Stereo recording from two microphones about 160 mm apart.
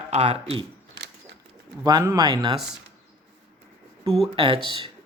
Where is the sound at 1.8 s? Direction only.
20° right (ahead or behind).